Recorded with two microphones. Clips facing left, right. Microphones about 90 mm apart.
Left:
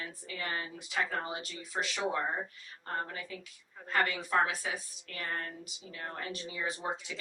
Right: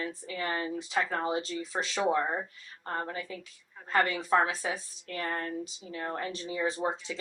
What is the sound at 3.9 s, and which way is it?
A woman's voice, 30° right (ahead or behind).